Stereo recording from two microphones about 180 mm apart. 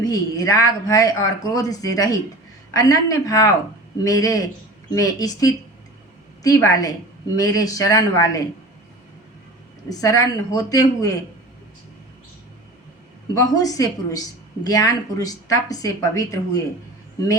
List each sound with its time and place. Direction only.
0.0 s speech: 20° left (ahead or behind)
9.9 s speech: 20° left (ahead or behind)
13.3 s speech: 20° left (ahead or behind)